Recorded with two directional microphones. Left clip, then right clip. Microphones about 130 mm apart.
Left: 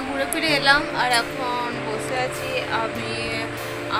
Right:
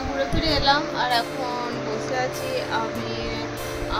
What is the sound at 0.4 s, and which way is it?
Speech, 10° left (ahead or behind).